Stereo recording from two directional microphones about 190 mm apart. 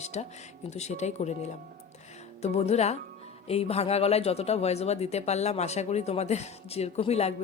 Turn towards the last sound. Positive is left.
turn(degrees=35)  # may be behind; listen again after turning